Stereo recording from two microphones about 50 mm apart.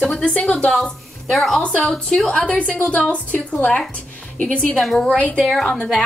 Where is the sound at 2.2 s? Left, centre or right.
Left.